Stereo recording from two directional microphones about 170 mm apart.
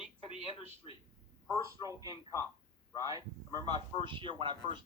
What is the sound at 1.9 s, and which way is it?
Speech, 20° right (ahead or behind).